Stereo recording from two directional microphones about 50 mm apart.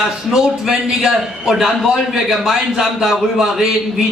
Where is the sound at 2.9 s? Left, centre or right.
Centre.